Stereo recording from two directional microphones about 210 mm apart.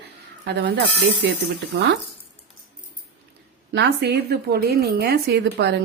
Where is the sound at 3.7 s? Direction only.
50° right (ahead or behind).